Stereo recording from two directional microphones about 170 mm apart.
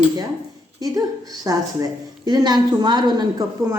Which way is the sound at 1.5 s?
20° right (ahead or behind).